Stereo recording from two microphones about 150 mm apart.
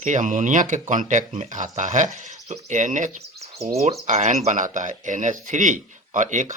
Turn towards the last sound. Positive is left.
turn(degrees=-55)  # may be behind; listen again after turning